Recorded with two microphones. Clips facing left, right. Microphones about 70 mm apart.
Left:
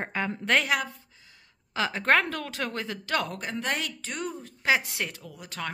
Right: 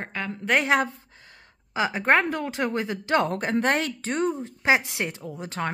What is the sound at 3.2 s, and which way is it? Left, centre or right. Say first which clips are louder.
Speech: right 8 dB; right.